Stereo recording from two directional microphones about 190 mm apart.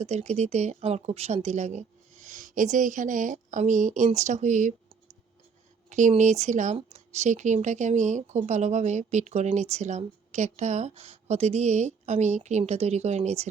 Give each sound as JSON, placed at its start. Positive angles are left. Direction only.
{"t": 0.0, "sound": "speech", "side_deg": -35}